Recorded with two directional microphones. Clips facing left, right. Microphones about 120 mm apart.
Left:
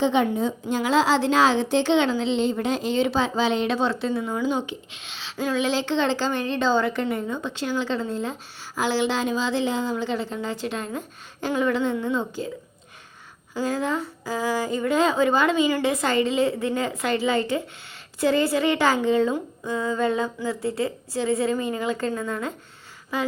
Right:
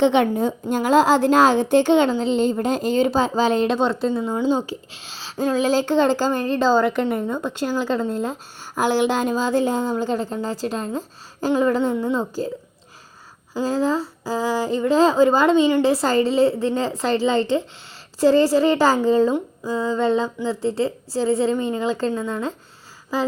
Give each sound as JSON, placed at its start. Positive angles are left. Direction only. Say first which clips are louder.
{"t": 0.0, "sound": "a woman's voice", "louder": "right 4 dB", "side_deg": -70}
{"t": 13.5, "sound": "a woman's voice", "louder": "right 4 dB", "side_deg": -30}